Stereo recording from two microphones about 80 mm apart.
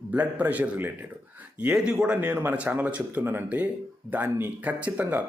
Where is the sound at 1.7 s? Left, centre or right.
Centre.